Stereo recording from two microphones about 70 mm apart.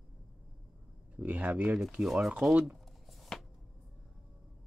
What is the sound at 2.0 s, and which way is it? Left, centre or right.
Speech, centre.